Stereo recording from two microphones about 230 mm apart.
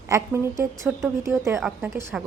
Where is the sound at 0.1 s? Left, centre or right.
Centre.